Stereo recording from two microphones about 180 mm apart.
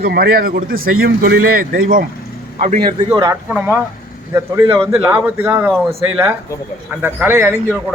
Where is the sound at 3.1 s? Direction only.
15° right (ahead or behind).